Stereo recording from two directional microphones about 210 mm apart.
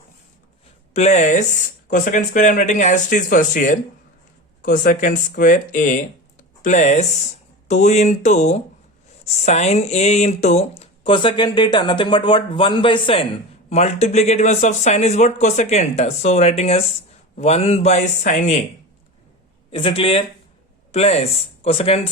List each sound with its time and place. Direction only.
0.9 s speech: 35° left (ahead or behind)
19.7 s speech: 25° left (ahead or behind)